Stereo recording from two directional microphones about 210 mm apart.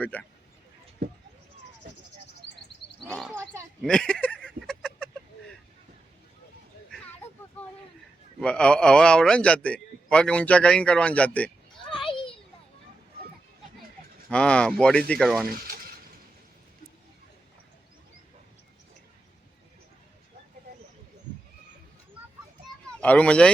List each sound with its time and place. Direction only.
0.0 s speech: 5° left (ahead or behind)
1.0 s speech: 50° right (ahead or behind)
3.1 s a sound: centre (ahead or behind)
8.4 s a man's voice: 5° left (ahead or behind)
12.0 s children playing: 25° left (ahead or behind)
14.3 s a man's voice: 5° left (ahead or behind)
22.9 s speech: 5° left (ahead or behind)